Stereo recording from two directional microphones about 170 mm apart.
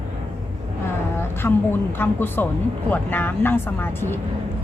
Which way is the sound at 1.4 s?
10° left (ahead or behind).